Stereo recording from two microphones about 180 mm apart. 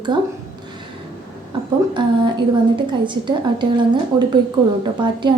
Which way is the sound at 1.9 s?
25° right (ahead or behind).